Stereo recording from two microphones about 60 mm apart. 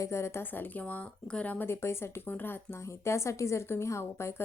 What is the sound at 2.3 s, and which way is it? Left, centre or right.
Speech, left.